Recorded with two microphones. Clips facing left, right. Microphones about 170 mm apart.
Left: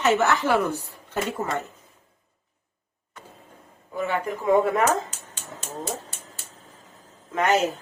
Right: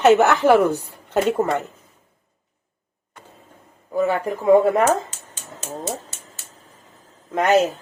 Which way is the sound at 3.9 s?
35° right (ahead or behind).